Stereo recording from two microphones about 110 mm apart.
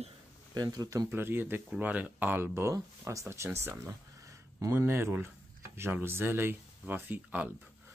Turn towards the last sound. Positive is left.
turn(degrees=-15)  # may be behind; listen again after turning